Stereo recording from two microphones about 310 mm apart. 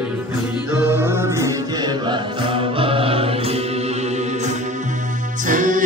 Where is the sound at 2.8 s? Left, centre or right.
Centre.